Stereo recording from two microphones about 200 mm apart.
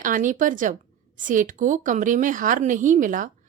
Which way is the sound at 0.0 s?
40° right (ahead or behind).